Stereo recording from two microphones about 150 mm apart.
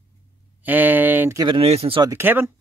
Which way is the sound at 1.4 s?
35° right (ahead or behind).